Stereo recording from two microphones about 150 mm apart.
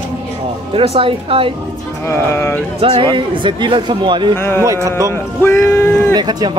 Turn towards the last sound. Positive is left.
turn(degrees=-25)  # may be behind; listen again after turning